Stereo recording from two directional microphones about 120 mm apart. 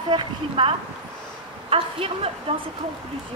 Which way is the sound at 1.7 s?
50° right (ahead or behind).